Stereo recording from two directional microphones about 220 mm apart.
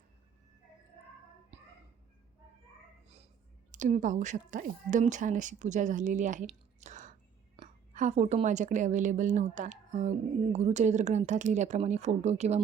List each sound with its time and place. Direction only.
3.7 s a woman's voice: 35° right (ahead or behind)